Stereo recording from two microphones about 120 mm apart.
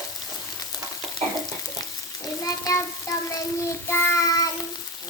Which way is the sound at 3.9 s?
20° left (ahead or behind).